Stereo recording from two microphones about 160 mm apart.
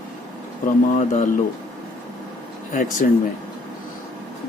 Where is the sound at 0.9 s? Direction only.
45° left (ahead or behind).